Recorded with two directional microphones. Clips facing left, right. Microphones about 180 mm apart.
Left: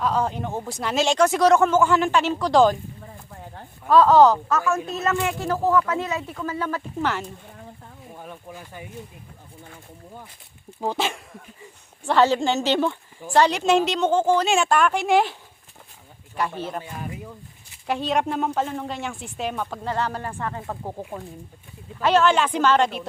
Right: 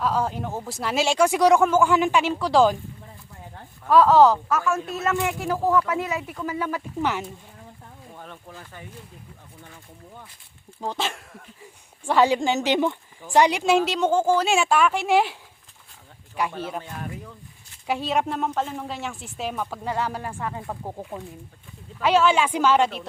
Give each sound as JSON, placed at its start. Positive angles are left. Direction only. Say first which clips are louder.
{"t": 0.0, "sound": "speech", "louder": "left 1 dB", "side_deg": -5}
{"t": 3.8, "sound": "speech", "louder": "left 1 dB", "side_deg": -10}
{"t": 8.1, "sound": "speech", "louder": "left 3 dB", "side_deg": 10}
{"t": 10.8, "sound": "speech", "louder": "left 3 dB", "side_deg": 5}
{"t": 12.0, "sound": "speech", "louder": "left 1 dB", "side_deg": -10}
{"t": 16.6, "sound": "speech", "louder": "left 1 dB", "side_deg": -10}
{"t": 17.8, "sound": "speech", "louder": "left 1 dB", "side_deg": -5}
{"t": 22.0, "sound": "speech", "louder": "left 1 dB", "side_deg": -10}